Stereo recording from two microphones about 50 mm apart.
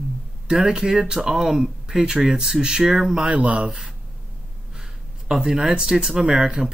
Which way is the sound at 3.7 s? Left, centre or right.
Centre.